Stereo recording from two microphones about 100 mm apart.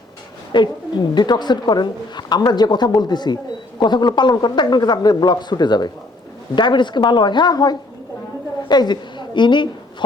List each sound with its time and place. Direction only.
0.5 s a woman's voice: 50° left (ahead or behind)